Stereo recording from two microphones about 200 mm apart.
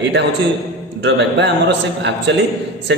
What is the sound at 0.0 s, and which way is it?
A man's voice, 60° right (ahead or behind).